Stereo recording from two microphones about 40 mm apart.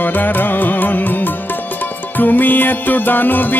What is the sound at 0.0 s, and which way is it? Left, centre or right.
Music, left.